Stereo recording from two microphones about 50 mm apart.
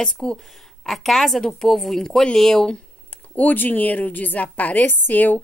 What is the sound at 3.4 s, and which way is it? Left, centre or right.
A woman's voice, left.